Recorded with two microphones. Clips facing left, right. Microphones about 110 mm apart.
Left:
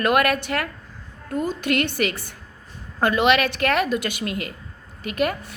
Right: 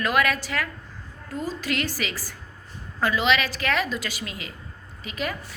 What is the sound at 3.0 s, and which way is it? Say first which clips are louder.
A woman's voice: left 4 dB; 55° left (ahead or behind).